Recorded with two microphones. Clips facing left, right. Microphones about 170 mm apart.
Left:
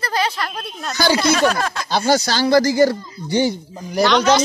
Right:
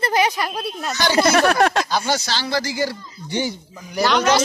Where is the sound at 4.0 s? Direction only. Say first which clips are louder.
Left 3 dB; 5° right (ahead or behind).